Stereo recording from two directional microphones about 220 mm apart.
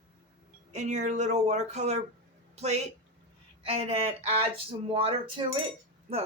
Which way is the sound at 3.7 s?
25° right (ahead or behind).